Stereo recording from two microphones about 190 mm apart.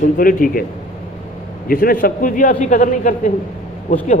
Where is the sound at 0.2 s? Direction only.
45° left (ahead or behind).